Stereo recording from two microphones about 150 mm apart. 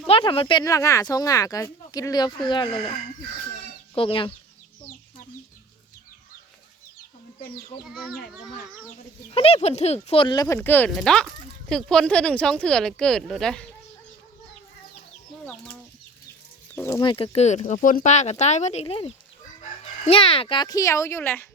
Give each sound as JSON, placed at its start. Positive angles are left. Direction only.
{"t": 0.1, "sound": "speech", "side_deg": 35}
{"t": 0.6, "sound": "speech", "side_deg": 20}
{"t": 3.9, "sound": "speech", "side_deg": 35}
{"t": 7.9, "sound": "speech", "side_deg": 0}
{"t": 9.3, "sound": "speech", "side_deg": 40}
{"t": 10.3, "sound": "speech", "side_deg": 20}
{"t": 15.4, "sound": "speech", "side_deg": 5}
{"t": 16.7, "sound": "speech", "side_deg": 15}
{"t": 17.0, "sound": "speech", "side_deg": 35}